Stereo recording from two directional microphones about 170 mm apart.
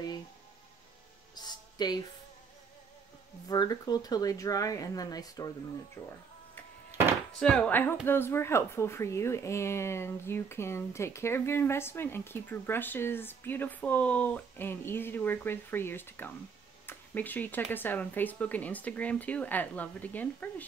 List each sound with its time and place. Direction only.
1.3 s a sound: 25° left (ahead or behind)
3.4 s speech: 25° left (ahead or behind)
6.0 s speech: 10° left (ahead or behind)
7.3 s speech: 5° left (ahead or behind)